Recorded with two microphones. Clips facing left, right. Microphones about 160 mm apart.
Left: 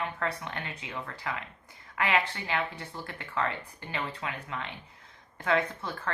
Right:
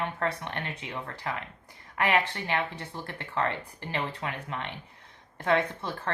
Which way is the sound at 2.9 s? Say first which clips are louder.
Right 2 dB; 25° right (ahead or behind).